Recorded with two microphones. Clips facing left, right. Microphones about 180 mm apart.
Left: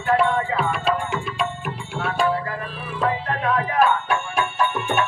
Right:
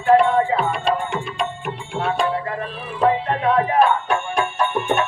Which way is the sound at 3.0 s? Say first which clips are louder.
Right 5 dB; 30° right (ahead or behind).